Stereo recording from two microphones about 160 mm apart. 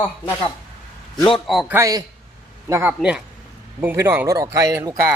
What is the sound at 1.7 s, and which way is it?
Speech, 20° right (ahead or behind).